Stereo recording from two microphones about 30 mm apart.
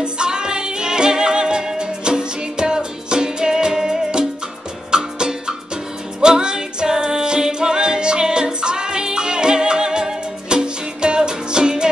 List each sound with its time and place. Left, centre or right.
0.0 s music: right
6.2 s music: right